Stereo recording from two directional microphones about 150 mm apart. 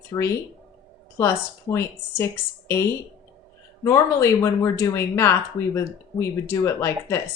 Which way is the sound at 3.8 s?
20° left (ahead or behind).